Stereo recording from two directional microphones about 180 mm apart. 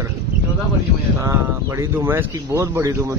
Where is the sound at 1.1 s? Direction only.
15° right (ahead or behind).